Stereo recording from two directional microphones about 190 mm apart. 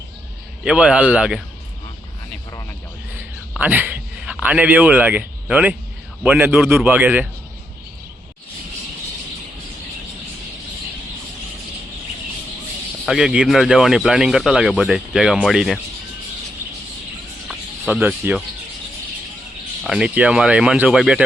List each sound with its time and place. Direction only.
0.6 s a man's voice: 5° right (ahead or behind)
3.5 s a man's voice: 10° right (ahead or behind)
13.1 s speech: 5° right (ahead or behind)
17.5 s speech: 5° right (ahead or behind)
19.8 s speech: 5° right (ahead or behind)